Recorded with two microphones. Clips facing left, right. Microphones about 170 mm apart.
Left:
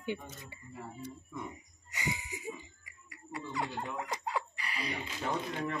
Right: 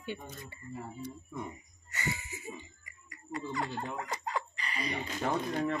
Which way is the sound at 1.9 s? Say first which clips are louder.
Even; 15° left (ahead or behind).